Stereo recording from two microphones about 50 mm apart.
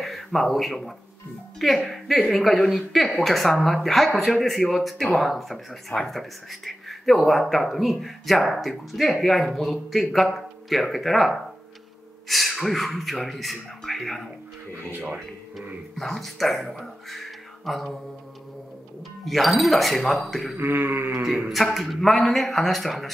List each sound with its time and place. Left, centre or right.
0.0 s speech: centre
16.0 s speech: centre
19.2 s speech: centre
20.5 s sheep: right
21.5 s speech: centre